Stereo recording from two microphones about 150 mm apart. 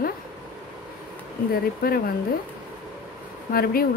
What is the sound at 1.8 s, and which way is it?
Speech, 80° left.